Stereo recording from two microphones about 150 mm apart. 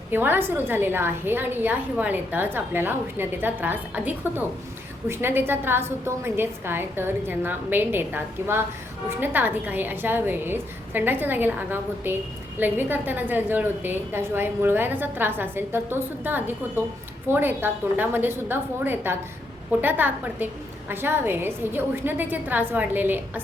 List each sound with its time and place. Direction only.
0.1 s a woman's voice: 15° right (ahead or behind)